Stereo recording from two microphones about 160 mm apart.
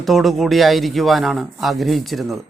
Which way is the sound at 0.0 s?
Centre (ahead or behind).